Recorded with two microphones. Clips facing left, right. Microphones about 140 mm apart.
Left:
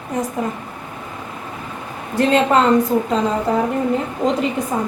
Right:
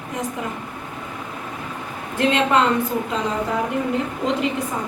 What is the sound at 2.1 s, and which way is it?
Speech, 40° left (ahead or behind).